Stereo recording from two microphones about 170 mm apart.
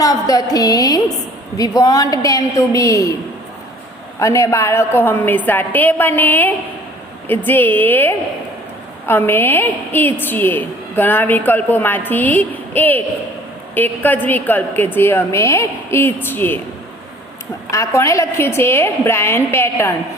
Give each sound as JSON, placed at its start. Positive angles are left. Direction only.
{"t": 0.0, "sound": "a woman's voice", "side_deg": 20}
{"t": 4.2, "sound": "a woman's voice", "side_deg": 20}
{"t": 17.7, "sound": "a woman's voice", "side_deg": 20}